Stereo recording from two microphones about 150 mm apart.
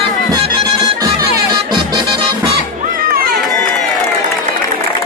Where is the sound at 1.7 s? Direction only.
30° right (ahead or behind).